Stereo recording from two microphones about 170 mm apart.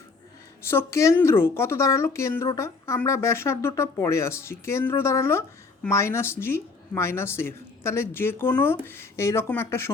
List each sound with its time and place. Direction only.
0.7 s speech: 15° left (ahead or behind)